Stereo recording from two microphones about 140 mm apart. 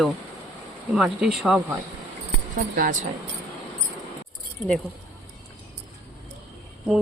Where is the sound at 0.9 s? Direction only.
5° right (ahead or behind).